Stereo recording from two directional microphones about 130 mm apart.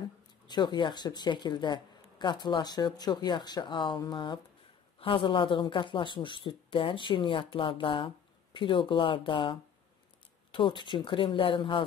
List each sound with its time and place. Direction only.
0.5 s speech: 35° left (ahead or behind)